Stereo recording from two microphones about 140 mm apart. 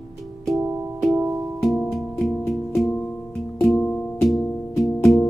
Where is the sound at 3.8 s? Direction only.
15° left (ahead or behind).